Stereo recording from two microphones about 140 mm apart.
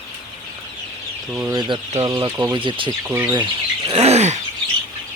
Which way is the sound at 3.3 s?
35° right (ahead or behind).